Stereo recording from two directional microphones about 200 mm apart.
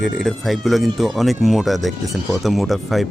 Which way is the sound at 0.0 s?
Centre (ahead or behind).